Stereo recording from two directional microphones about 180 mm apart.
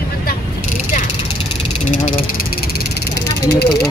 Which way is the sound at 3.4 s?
60° left (ahead or behind).